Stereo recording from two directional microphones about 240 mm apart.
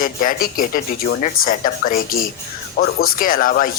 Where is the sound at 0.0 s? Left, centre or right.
Left.